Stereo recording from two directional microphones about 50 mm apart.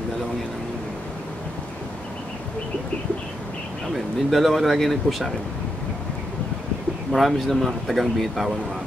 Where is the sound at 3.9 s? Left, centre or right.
Centre.